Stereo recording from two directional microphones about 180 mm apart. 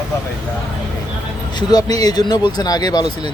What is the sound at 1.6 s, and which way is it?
Speech, 20° left (ahead or behind).